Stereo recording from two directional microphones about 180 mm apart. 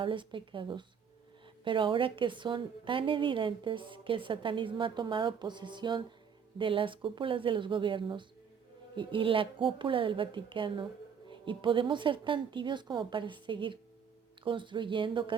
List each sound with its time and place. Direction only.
0.0 s a woman's voice: 30° right (ahead or behind)